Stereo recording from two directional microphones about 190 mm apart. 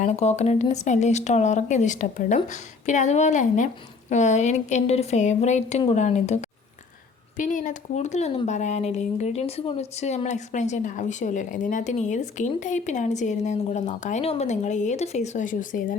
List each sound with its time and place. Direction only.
0.0 s speech: 35° left (ahead or behind)